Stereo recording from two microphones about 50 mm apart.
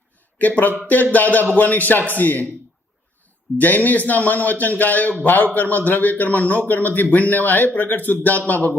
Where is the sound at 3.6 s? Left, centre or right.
Left.